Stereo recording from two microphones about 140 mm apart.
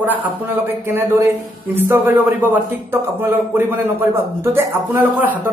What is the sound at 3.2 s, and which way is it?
Speech, 15° right (ahead or behind).